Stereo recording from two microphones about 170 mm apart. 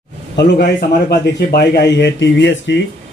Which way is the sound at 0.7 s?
70° left (ahead or behind).